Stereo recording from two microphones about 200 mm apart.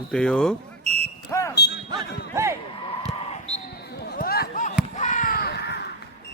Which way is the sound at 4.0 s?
50° left (ahead or behind).